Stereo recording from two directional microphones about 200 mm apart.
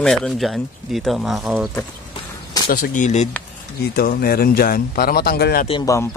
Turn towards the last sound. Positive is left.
turn(degrees=15)  # may be behind; listen again after turning